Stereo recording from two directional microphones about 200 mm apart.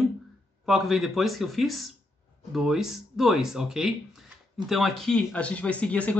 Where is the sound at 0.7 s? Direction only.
Centre (ahead or behind).